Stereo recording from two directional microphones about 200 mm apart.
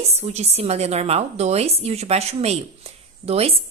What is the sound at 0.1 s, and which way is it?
A woman's voice, 35° right (ahead or behind).